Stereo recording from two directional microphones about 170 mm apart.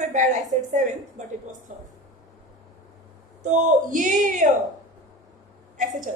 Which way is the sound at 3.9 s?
45° right (ahead or behind).